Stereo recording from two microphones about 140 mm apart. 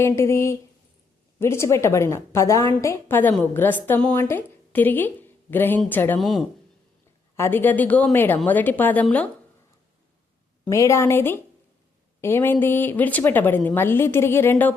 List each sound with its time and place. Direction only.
0.0 s a woman's voice: 20° left (ahead or behind)
6.1 s speech: centre (ahead or behind)
7.3 s a woman's voice: 15° left (ahead or behind)
10.7 s a woman's voice: 20° left (ahead or behind)